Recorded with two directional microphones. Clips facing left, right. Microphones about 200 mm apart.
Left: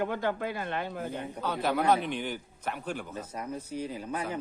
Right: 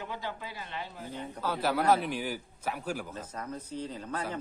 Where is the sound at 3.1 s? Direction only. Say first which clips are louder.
Left 2 dB; 10° left (ahead or behind).